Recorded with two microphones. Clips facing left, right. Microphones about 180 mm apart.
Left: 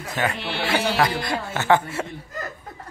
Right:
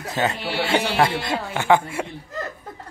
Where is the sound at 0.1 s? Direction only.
25° right (ahead or behind).